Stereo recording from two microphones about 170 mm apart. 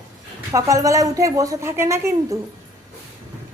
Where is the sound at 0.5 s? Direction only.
20° right (ahead or behind).